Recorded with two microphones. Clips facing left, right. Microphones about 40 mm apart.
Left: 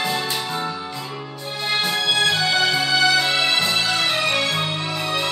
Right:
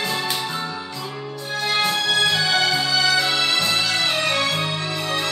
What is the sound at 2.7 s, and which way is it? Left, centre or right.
Music, centre.